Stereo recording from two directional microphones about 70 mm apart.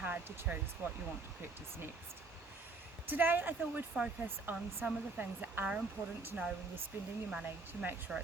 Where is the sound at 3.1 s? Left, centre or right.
Right.